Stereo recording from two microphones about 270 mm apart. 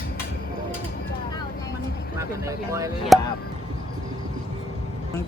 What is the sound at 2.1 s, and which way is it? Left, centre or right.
Speech, centre.